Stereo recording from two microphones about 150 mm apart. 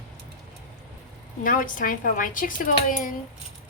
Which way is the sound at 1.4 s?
65° left (ahead or behind).